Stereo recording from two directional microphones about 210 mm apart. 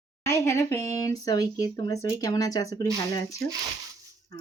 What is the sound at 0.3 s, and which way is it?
Speech, 15° left (ahead or behind).